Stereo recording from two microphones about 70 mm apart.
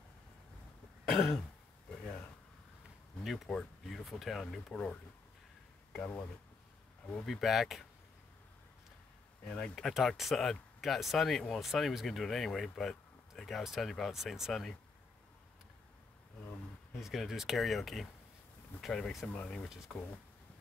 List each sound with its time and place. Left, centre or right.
1.0 s throat clearing: centre
1.9 s a sound: centre
3.3 s speech: centre
5.9 s speech: centre
7.2 s speech: centre
9.4 s speech: centre
17.0 s speech: centre